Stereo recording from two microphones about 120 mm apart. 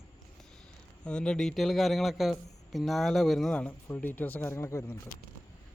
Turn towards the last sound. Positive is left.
turn(degrees=25)  # may be behind; listen again after turning